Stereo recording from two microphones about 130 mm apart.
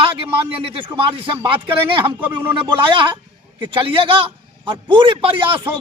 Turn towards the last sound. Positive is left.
turn(degrees=-40)  # may be behind; listen again after turning